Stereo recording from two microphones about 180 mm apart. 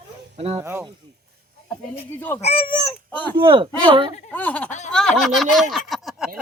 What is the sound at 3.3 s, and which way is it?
Speech, 30° right (ahead or behind).